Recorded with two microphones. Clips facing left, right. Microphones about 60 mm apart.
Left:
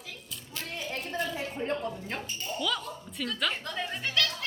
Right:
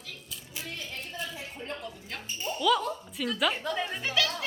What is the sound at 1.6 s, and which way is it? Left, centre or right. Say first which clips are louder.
Music: left 7 dB; left.